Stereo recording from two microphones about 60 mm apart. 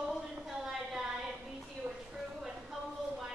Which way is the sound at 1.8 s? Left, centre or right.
Right.